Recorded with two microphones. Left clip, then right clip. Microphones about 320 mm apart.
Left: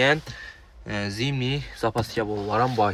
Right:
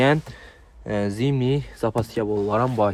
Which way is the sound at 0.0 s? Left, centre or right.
Centre.